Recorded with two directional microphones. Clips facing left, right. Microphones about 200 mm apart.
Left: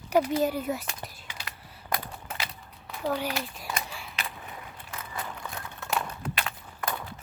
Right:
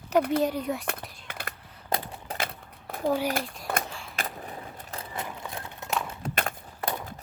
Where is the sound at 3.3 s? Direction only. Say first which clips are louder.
Right 3 dB; 50° right (ahead or behind).